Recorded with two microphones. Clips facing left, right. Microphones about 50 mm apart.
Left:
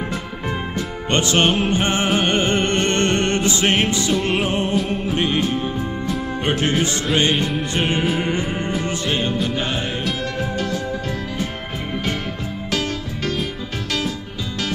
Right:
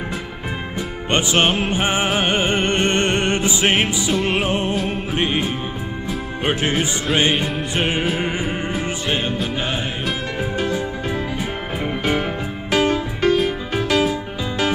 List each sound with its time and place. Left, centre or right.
0.7 s music: centre
6.7 s music: centre
12.7 s music: centre